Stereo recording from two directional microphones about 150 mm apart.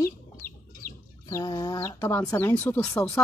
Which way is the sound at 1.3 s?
25° left (ahead or behind).